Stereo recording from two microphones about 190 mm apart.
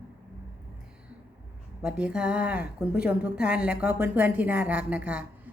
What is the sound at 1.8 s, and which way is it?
A woman's voice, 5° right (ahead or behind).